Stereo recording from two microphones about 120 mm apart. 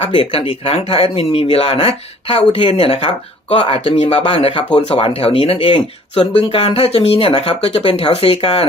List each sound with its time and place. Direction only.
0.1 s speech: 45° left (ahead or behind)